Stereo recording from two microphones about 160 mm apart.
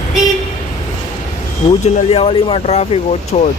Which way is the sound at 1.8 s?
40° left (ahead or behind).